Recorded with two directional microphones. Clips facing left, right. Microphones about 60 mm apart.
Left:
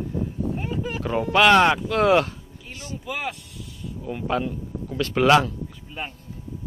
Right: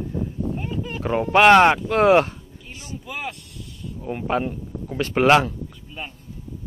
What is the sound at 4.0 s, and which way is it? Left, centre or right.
Speech, right.